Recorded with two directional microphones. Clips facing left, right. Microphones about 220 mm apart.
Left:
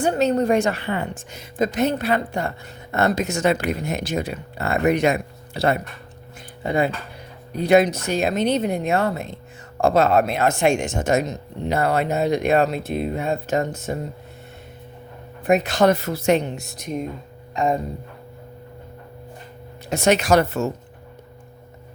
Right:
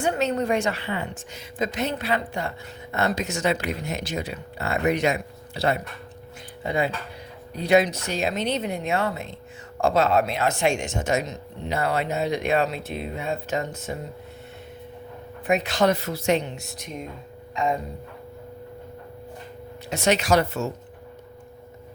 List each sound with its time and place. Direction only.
0.0 s a woman's voice: 35° left (ahead or behind)
15.4 s a woman's voice: 45° left (ahead or behind)
17.5 s a sound: 45° left (ahead or behind)
19.9 s a woman's voice: 50° left (ahead or behind)